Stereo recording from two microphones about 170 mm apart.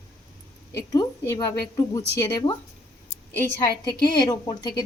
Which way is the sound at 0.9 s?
20° left (ahead or behind).